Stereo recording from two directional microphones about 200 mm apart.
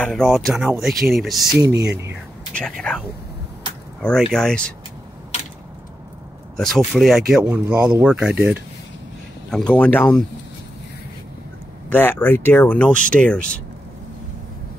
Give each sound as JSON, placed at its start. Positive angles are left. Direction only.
{"t": 0.0, "sound": "speech", "side_deg": 5}
{"t": 1.6, "sound": "speech", "side_deg": -15}
{"t": 4.0, "sound": "speech", "side_deg": 5}
{"t": 5.3, "sound": "a sound", "side_deg": 35}
{"t": 6.5, "sound": "speech", "side_deg": 0}
{"t": 11.9, "sound": "speech", "side_deg": 10}